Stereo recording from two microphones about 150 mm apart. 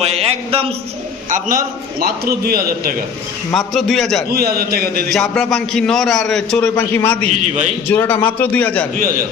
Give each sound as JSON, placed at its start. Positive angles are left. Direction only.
{"t": 0.0, "sound": "a sound", "side_deg": -45}
{"t": 1.3, "sound": "a man's voice", "side_deg": -65}
{"t": 3.5, "sound": "a man's voice", "side_deg": 0}
{"t": 4.3, "sound": "a man's voice", "side_deg": -90}
{"t": 5.1, "sound": "a man's voice", "side_deg": 0}
{"t": 6.6, "sound": "a man's voice", "side_deg": 15}